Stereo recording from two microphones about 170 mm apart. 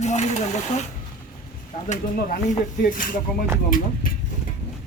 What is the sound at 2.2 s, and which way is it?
Speech, 55° left (ahead or behind).